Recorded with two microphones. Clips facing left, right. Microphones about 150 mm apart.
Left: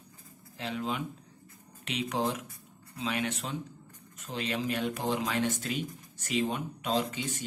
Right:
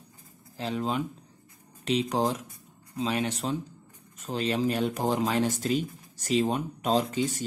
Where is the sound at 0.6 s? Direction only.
35° right (ahead or behind).